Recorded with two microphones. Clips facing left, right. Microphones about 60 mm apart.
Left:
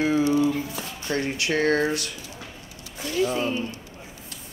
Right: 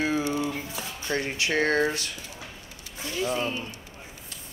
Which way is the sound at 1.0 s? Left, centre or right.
Right.